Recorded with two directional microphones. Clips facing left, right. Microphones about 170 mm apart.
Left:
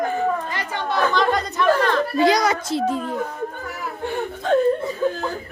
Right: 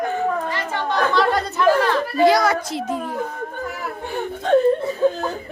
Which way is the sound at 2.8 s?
30° left (ahead or behind).